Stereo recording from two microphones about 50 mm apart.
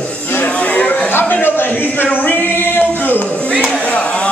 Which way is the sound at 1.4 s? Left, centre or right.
Left.